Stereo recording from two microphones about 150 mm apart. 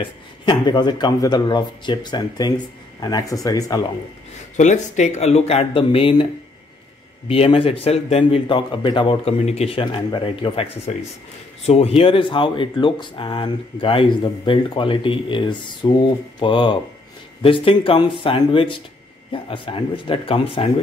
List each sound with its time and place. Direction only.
0.0 s speech: 30° left (ahead or behind)
4.6 s speech: 55° left (ahead or behind); by 6.2 s 35° left (ahead or behind)
7.2 s speech: 40° left (ahead or behind)